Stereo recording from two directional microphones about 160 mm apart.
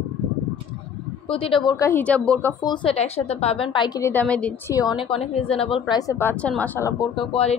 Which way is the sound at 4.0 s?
10° left (ahead or behind).